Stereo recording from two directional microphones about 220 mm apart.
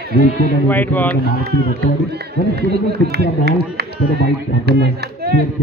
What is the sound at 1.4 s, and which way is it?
Speech, 45° right (ahead or behind).